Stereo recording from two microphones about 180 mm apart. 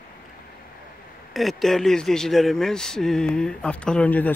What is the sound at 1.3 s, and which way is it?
Speech, centre (ahead or behind).